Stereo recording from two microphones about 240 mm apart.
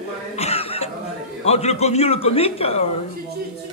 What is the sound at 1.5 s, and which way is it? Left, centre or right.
Speech, left.